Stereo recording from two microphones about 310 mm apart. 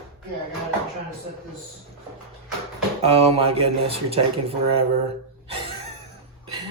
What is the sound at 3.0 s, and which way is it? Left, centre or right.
Speech, centre.